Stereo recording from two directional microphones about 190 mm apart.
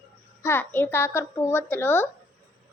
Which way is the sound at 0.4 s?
10° left (ahead or behind).